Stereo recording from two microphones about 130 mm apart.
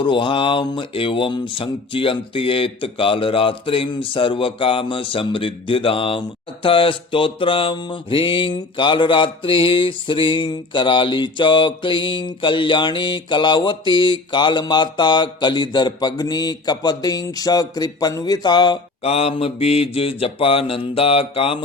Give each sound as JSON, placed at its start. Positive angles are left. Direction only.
{"t": 0.0, "sound": "speech", "side_deg": 40}
{"t": 19.0, "sound": "mantra", "side_deg": 50}